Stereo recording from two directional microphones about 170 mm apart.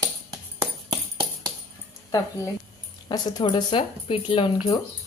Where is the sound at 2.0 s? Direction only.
20° left (ahead or behind).